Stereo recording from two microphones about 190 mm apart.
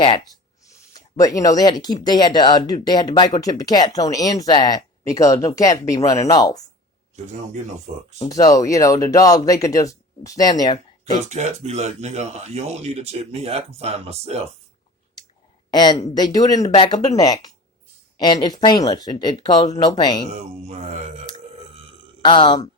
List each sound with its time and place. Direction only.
0.6 s a sound: 15° left (ahead or behind)
2.0 s speech: 20° left (ahead or behind)
7.9 s speech: 40° right (ahead or behind)
8.3 s speech: 20° left (ahead or behind)
11.0 s speech: 35° right (ahead or behind)
15.7 s speech: 20° left (ahead or behind)
20.3 s speech: 35° right (ahead or behind)
21.3 s burping: 30° right (ahead or behind)
22.2 s speech: 25° left (ahead or behind)